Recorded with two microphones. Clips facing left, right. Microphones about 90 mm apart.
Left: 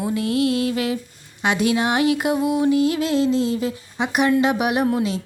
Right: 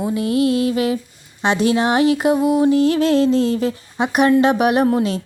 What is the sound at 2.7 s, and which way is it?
Speech, 40° right (ahead or behind).